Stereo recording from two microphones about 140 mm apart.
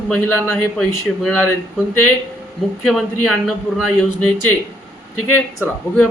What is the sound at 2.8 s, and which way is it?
Speech, 5° left (ahead or behind).